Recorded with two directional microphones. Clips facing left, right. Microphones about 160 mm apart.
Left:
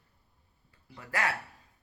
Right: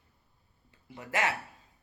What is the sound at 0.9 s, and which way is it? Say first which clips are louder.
Speech: right 2 dB; 20° right (ahead or behind).